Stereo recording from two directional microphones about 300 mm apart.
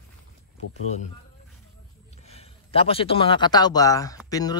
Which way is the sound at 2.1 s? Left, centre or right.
Left.